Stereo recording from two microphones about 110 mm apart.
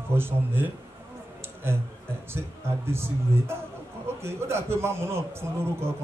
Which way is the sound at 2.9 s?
25° right (ahead or behind).